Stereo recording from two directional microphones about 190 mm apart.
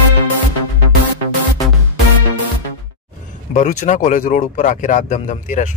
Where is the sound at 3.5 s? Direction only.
40° left (ahead or behind).